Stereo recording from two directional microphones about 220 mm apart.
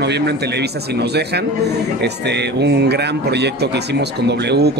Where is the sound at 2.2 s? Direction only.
50° right (ahead or behind).